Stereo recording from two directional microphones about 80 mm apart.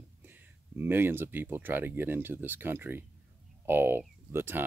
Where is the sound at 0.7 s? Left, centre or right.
Right.